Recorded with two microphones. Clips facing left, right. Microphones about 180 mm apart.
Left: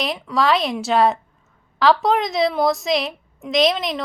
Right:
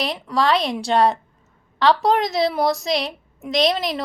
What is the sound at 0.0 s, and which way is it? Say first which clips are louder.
A woman's voice: even; centre (ahead or behind).